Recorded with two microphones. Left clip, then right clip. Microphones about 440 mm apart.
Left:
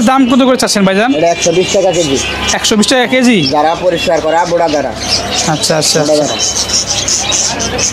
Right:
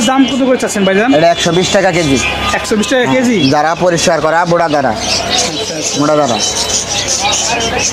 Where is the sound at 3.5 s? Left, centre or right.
Right.